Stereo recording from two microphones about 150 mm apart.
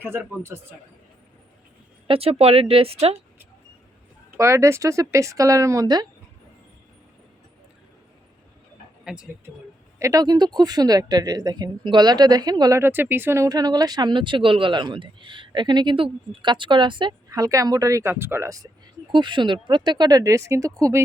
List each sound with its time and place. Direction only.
0.0 s speech: 15° right (ahead or behind)
2.0 s speech: 40° right (ahead or behind)
4.3 s speech: 20° right (ahead or behind)
9.1 s speech: 5° right (ahead or behind)
10.0 s speech: 25° right (ahead or behind)
12.8 s speech: 15° right (ahead or behind)